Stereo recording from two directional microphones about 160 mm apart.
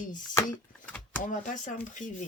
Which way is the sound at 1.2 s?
55° left (ahead or behind).